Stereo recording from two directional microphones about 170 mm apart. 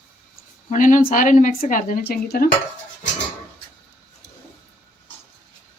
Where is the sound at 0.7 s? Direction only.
50° left (ahead or behind).